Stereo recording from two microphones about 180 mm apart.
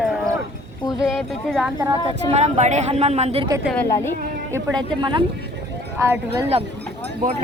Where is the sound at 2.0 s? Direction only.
35° right (ahead or behind).